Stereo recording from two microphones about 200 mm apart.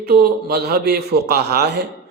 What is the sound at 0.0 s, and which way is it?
A man's voice, 50° right (ahead or behind).